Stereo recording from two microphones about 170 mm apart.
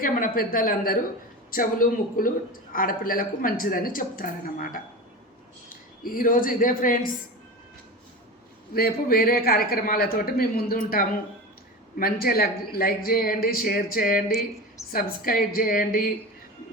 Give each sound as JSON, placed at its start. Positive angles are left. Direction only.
{"t": 0.0, "sound": "speech", "side_deg": 55}
{"t": 8.7, "sound": "speech", "side_deg": 60}